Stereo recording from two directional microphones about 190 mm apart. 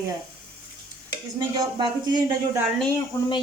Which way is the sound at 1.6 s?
20° right (ahead or behind).